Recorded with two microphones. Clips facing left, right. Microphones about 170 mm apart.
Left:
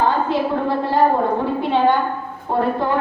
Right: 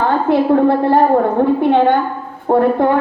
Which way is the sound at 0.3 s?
60° right (ahead or behind).